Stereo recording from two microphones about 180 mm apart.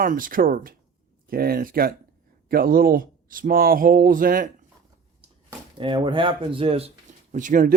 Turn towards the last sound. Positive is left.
turn(degrees=-45)  # may be behind; listen again after turning